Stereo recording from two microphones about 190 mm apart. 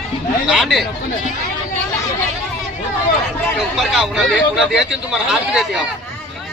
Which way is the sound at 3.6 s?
Centre (ahead or behind).